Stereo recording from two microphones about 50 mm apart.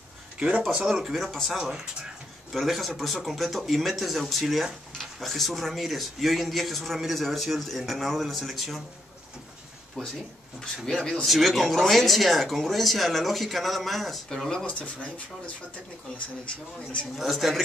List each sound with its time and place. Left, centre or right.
0.8 s speech: centre
1.1 s speech: centre
1.6 s speech: centre
2.5 s speech: centre
10.0 s speech: centre
11.2 s speech: centre
14.7 s speech: left
17.2 s speech: centre